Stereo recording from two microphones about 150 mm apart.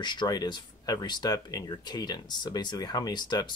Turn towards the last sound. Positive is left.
turn(degrees=30)  # may be behind; listen again after turning